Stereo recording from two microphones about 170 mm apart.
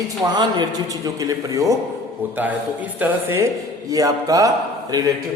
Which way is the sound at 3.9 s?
20° right (ahead or behind).